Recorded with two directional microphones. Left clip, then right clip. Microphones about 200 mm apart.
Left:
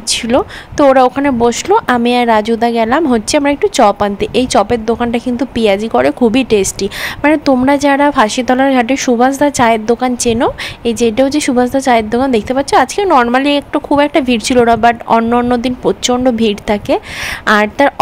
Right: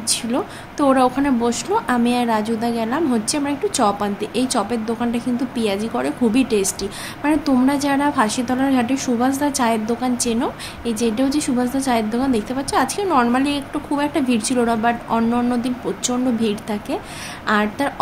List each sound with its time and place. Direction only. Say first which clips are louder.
0.1 s a woman's voice: left 10 dB; 45° left (ahead or behind)